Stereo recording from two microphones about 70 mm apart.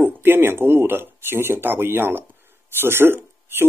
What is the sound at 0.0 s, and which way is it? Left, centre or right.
Speech, right.